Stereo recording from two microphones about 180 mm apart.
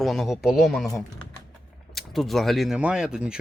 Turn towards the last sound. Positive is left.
turn(degrees=-5)  # may be behind; listen again after turning